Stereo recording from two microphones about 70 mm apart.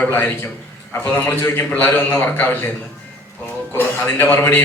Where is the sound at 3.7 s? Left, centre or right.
Left.